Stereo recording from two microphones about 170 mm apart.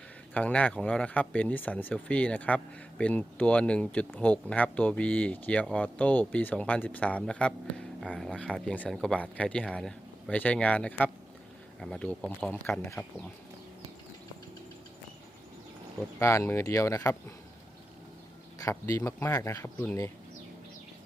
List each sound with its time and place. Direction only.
0.3 s speech: 10° left (ahead or behind)
16.1 s speech: 15° left (ahead or behind)
18.6 s speech: 20° left (ahead or behind)